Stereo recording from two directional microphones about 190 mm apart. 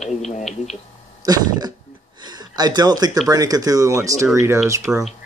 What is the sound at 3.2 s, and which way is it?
Speech, 20° right (ahead or behind).